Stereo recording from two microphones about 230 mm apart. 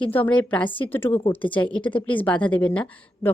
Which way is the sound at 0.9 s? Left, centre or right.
Centre.